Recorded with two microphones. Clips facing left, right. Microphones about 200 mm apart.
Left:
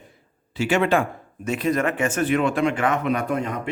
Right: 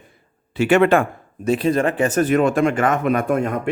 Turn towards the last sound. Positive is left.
turn(degrees=-50)  # may be behind; listen again after turning